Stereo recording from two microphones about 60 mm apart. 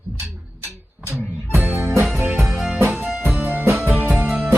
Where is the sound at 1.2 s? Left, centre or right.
Left.